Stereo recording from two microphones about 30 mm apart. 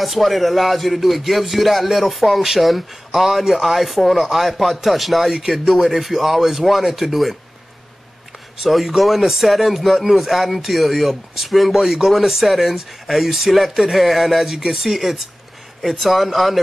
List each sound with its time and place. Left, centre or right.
0.0 s speech: centre
8.6 s speech: centre
11.7 s speech: centre
12.4 s speech: centre